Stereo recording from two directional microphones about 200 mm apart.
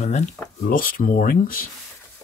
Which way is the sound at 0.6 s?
45° left (ahead or behind).